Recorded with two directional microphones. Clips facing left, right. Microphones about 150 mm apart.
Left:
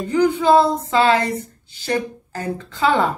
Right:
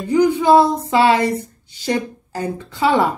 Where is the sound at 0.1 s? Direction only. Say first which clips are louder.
Right 2 dB; 15° right (ahead or behind).